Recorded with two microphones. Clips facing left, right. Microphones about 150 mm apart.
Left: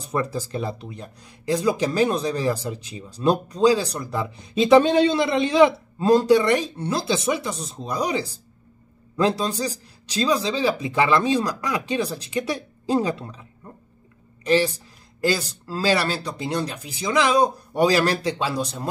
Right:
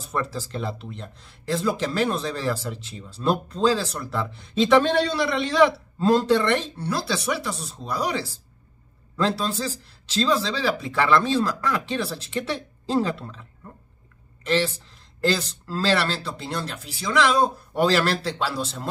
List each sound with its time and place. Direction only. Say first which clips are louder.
0.0 s speech: left 3 dB; 15° left (ahead or behind)